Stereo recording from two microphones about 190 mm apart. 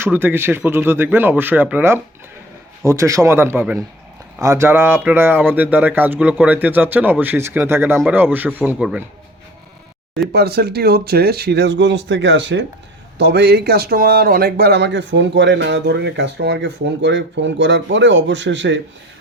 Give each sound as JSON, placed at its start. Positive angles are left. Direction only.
{"t": 0.0, "sound": "speech", "side_deg": -10}
{"t": 10.3, "sound": "speech", "side_deg": -60}
{"t": 13.1, "sound": "speech", "side_deg": -60}